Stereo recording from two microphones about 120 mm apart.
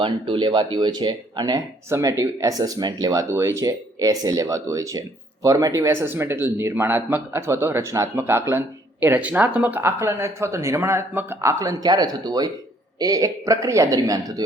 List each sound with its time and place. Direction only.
0.0 s speech: 45° right (ahead or behind)